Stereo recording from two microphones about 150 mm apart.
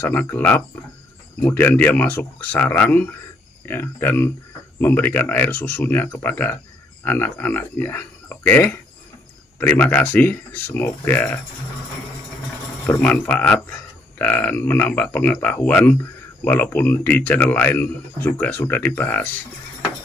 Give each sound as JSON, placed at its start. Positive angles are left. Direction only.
{"t": 0.0, "sound": "speech", "side_deg": 10}
{"t": 12.8, "sound": "speech", "side_deg": 10}